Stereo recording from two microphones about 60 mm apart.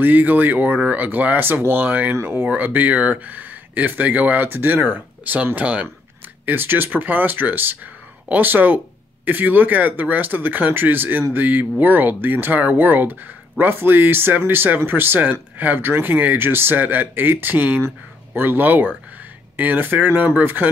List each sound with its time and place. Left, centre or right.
0.0 s speech: right
2.1 s speech: right
2.5 s speech: right
6.4 s speech: right